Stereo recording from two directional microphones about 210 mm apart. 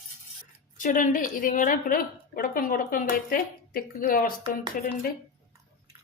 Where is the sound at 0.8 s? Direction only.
40° left (ahead or behind).